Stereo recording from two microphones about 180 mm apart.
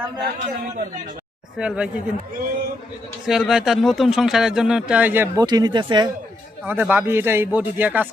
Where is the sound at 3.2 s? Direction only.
Centre (ahead or behind).